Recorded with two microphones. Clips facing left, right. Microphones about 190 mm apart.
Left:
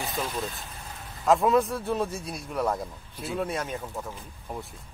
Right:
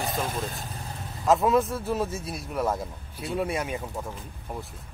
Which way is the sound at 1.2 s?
Centre (ahead or behind).